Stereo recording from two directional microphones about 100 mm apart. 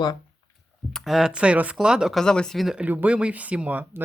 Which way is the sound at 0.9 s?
5° right (ahead or behind).